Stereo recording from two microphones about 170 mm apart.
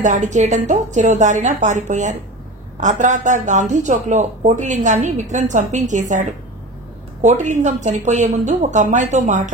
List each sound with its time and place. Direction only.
0.0 s speech: 45° right (ahead or behind)